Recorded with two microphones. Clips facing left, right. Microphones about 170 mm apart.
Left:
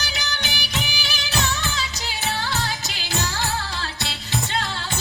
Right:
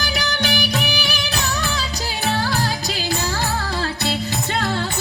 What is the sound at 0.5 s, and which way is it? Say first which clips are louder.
Music: right 8 dB; 55° right (ahead or behind).